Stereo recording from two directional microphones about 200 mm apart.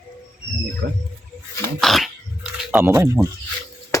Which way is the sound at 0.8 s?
55° right (ahead or behind).